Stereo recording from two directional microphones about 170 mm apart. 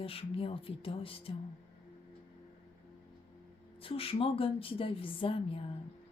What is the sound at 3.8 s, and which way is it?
Speech, 35° left (ahead or behind).